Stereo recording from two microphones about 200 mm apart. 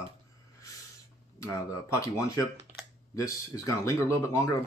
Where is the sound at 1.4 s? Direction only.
15° left (ahead or behind).